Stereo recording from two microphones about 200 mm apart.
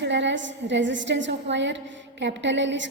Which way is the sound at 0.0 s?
65° right (ahead or behind).